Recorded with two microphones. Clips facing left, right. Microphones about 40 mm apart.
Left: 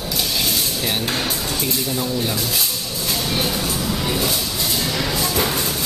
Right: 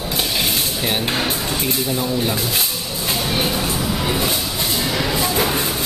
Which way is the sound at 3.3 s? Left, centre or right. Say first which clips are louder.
Right 2 dB; centre.